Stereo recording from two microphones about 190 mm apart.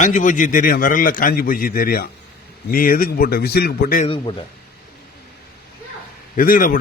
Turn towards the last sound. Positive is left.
turn(degrees=45)  # may be behind; listen again after turning